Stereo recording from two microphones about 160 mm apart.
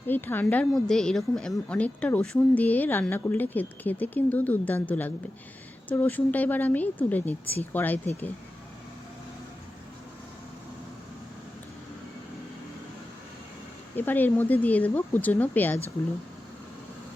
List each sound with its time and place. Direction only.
0.1 s a woman's voice: 10° left (ahead or behind)
13.9 s a woman's voice: 10° left (ahead or behind)